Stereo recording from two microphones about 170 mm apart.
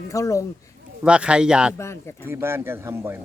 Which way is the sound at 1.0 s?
5° right (ahead or behind).